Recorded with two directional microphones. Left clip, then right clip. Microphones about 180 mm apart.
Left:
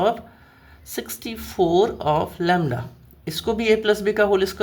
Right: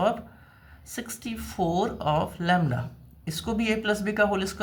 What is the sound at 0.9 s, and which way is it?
Speech, 30° left (ahead or behind).